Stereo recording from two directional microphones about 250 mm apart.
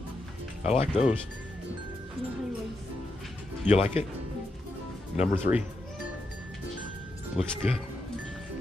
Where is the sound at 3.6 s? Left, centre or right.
Left.